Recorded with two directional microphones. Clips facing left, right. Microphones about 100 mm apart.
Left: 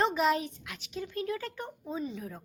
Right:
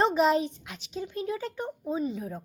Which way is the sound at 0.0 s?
25° right (ahead or behind).